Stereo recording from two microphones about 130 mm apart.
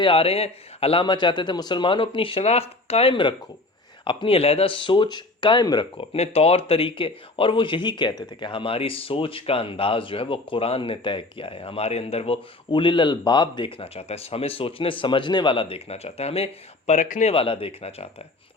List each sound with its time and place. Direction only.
0.0 s speech: 45° left (ahead or behind)
6.1 s speech: 50° left (ahead or behind); by 17.3 s 70° left (ahead or behind)
17.3 s speech: 45° left (ahead or behind)